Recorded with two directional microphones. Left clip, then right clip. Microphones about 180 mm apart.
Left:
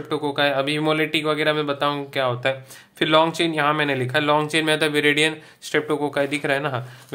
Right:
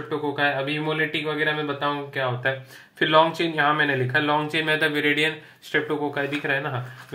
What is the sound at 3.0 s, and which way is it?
Speech, 35° left (ahead or behind).